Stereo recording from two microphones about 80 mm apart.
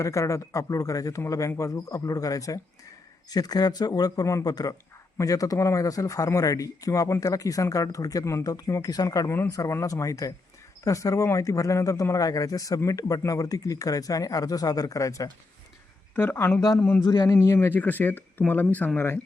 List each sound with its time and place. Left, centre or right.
0.0 s a man's voice: left
8.4 s speech: left
16.1 s speech: left
17.0 s a man's voice: left
17.2 s speech: left
17.7 s speech: left